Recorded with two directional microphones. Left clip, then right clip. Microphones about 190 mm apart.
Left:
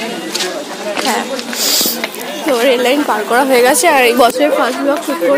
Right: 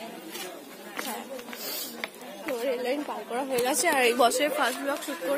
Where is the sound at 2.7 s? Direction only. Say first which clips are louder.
Left 17 dB; 5° left (ahead or behind).